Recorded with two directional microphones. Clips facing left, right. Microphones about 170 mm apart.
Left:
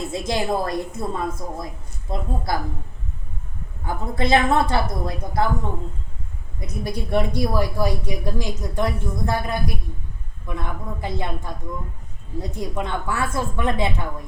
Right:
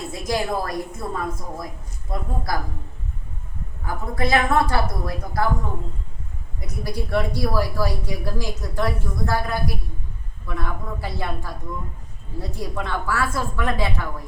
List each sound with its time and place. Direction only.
0.1 s speech: 25° left (ahead or behind)
3.8 s speech: 25° left (ahead or behind)
6.6 s speech: 20° left (ahead or behind)